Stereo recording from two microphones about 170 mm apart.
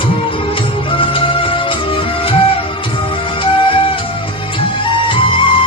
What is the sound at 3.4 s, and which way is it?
Music, 30° left (ahead or behind).